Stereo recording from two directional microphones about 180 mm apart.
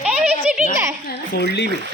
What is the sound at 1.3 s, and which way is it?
Speech, 70° left (ahead or behind).